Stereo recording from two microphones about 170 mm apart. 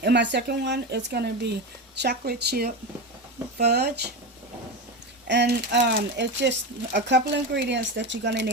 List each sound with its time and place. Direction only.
0.0 s speech: 90° right; by 4.1 s 70° right (ahead or behind)
5.3 s speech: 90° right